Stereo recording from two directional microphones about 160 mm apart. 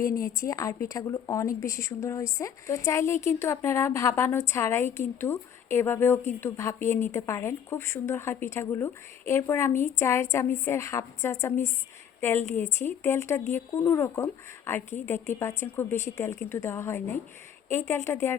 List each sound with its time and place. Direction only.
0.2 s a woman's voice: 20° left (ahead or behind)